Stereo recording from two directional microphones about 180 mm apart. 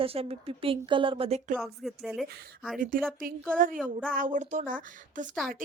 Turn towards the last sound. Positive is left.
turn(degrees=-45)  # may be behind; listen again after turning